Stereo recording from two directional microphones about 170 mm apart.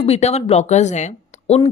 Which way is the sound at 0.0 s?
40° left (ahead or behind).